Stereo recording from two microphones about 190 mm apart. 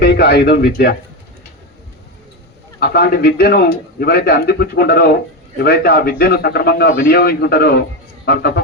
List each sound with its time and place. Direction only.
0.0 s speech: 60° left (ahead or behind)
2.8 s a man's voice: 55° left (ahead or behind)